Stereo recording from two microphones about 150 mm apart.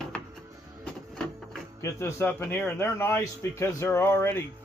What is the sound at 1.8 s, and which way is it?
A man's voice, 15° left (ahead or behind).